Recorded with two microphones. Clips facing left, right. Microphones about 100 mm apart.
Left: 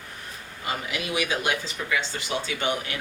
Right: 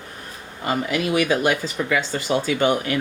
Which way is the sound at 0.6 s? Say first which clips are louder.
Right 8 dB; 45° right (ahead or behind).